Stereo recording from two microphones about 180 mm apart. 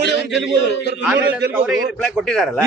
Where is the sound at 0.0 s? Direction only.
75° left (ahead or behind).